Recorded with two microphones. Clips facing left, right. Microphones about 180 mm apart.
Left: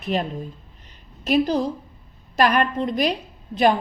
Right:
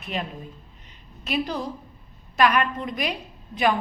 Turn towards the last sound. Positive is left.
turn(degrees=35)  # may be behind; listen again after turning